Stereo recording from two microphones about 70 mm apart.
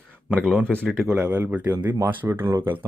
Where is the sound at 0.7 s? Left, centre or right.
Centre.